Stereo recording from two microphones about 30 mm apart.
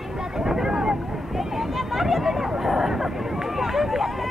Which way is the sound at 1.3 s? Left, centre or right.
Centre.